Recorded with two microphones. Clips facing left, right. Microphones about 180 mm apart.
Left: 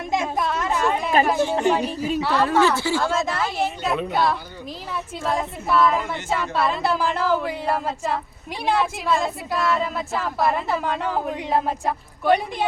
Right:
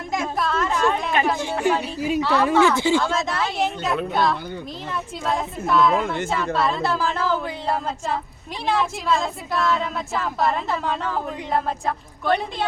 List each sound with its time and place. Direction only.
0.1 s a sound: 20° left (ahead or behind)
1.7 s speech: 10° right (ahead or behind)
3.0 s a woman's voice: 5° left (ahead or behind)
5.6 s a woman's voice: 5° left (ahead or behind)